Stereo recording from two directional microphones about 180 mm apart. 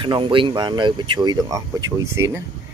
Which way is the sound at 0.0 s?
25° right (ahead or behind).